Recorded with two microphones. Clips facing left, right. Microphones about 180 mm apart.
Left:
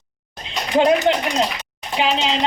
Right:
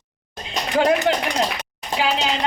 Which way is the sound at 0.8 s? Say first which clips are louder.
Left 2 dB; 20° left (ahead or behind).